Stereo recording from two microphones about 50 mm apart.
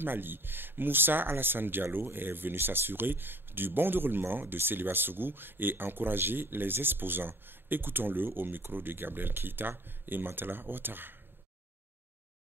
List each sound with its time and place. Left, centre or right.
0.0 s speech: right